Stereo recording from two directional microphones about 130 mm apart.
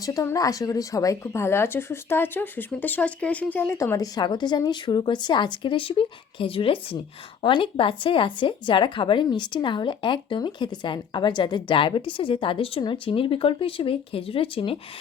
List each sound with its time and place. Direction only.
0.0 s a woman's voice: 25° left (ahead or behind); by 3.8 s 10° left (ahead or behind)
3.8 s speech: 25° left (ahead or behind); by 14.8 s 45° left (ahead or behind)